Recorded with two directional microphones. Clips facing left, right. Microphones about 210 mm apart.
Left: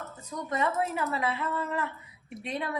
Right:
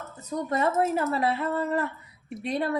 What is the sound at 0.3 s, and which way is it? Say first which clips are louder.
A woman's voice: right 4 dB; 35° right (ahead or behind).